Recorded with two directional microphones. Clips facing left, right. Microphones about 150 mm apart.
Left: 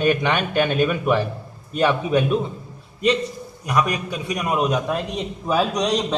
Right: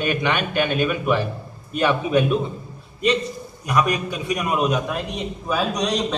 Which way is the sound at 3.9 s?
35° left (ahead or behind).